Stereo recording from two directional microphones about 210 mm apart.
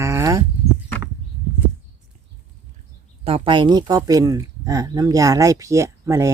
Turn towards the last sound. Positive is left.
turn(degrees=-15)  # may be behind; listen again after turning